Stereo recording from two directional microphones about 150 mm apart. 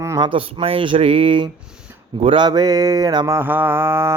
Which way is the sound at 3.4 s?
15° right (ahead or behind).